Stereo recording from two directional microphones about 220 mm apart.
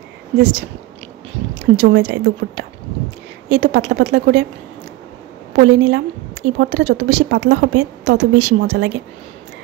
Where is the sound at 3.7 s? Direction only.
55° right (ahead or behind).